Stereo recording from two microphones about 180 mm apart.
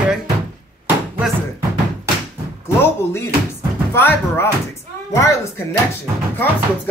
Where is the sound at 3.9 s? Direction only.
15° left (ahead or behind).